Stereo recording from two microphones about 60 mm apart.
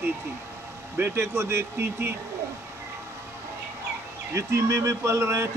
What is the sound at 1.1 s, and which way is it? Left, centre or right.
Speech, right.